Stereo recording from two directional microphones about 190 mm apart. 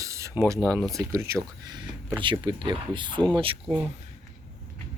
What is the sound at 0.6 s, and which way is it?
Speech, 10° left (ahead or behind).